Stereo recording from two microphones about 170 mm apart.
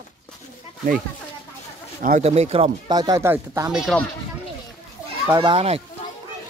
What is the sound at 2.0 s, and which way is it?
Speech, 45° right (ahead or behind).